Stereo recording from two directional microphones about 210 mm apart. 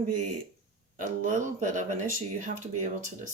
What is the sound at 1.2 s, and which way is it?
Speech, 35° right (ahead or behind).